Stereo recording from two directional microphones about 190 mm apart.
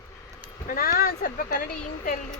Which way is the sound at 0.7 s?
50° left (ahead or behind).